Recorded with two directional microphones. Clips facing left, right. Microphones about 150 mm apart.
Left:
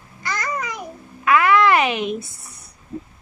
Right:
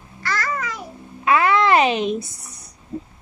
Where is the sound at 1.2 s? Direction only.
25° right (ahead or behind).